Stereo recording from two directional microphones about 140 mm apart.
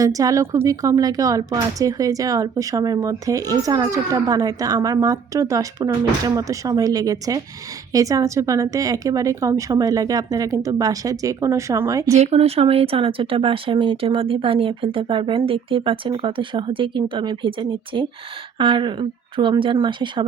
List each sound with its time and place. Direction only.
0.0 s a woman's voice: 25° right (ahead or behind)
12.2 s speech: 50° right (ahead or behind)